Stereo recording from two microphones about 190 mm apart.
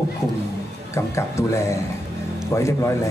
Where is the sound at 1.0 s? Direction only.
15° left (ahead or behind).